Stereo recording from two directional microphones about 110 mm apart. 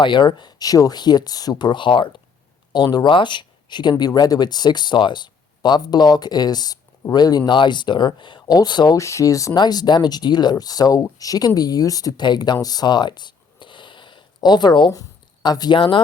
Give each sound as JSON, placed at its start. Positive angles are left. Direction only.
{"t": 0.0, "sound": "speech", "side_deg": 45}
{"t": 9.0, "sound": "speech", "side_deg": 30}
{"t": 12.6, "sound": "a sound", "side_deg": 40}
{"t": 15.4, "sound": "speech", "side_deg": 40}